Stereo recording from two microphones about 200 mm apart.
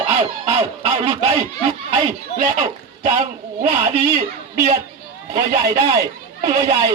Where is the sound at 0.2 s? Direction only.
30° right (ahead or behind).